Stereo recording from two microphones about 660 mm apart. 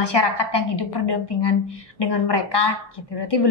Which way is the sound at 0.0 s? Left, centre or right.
Left.